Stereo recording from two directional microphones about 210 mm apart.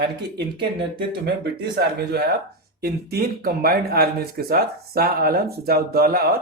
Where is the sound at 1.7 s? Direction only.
50° right (ahead or behind).